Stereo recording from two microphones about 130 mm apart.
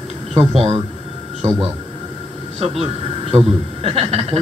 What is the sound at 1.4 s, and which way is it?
Speech, 60° right (ahead or behind).